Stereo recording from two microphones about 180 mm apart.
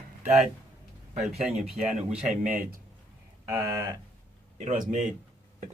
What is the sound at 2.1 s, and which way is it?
Speech, 45° right (ahead or behind).